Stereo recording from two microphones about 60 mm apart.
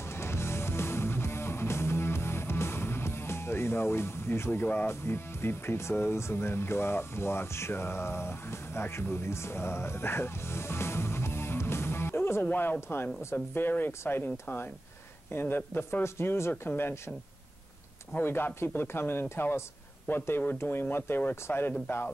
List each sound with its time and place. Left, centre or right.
0.1 s music: left
4.8 s speech: left
12.4 s speech: left
18.2 s speech: left